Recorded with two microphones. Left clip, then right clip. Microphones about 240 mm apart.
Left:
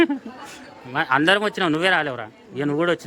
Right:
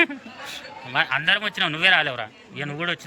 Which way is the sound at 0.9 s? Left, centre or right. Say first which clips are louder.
Left 2 dB; centre.